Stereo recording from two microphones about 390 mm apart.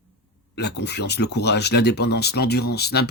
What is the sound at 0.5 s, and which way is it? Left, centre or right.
Speech, left.